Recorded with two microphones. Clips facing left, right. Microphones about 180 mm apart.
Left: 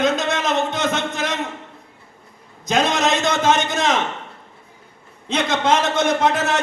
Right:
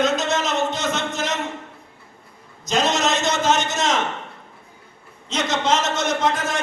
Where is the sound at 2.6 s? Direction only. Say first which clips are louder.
Left 2 dB; 55° left (ahead or behind).